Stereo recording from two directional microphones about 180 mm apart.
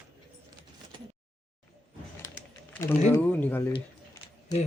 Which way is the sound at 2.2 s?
15° left (ahead or behind).